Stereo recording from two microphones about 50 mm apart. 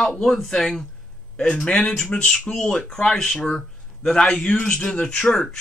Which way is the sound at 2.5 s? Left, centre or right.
Centre.